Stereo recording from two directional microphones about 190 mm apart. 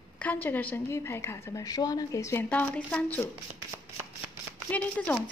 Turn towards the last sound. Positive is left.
turn(degrees=5)  # may be behind; listen again after turning